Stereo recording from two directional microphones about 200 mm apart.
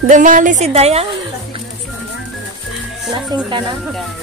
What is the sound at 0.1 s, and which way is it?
Speech, 40° right (ahead or behind).